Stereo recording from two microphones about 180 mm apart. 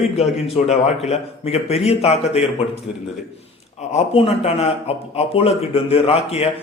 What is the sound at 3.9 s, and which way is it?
Speech, 30° left (ahead or behind).